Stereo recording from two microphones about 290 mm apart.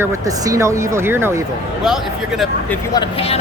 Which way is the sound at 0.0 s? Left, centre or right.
Centre.